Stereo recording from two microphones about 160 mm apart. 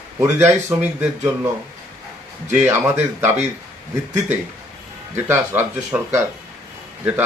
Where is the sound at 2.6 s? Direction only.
15° right (ahead or behind).